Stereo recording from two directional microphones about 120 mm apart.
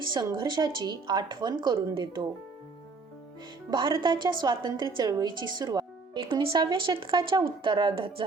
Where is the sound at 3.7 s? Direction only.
40° right (ahead or behind).